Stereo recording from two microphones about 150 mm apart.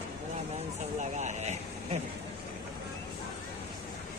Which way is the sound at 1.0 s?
50° right (ahead or behind).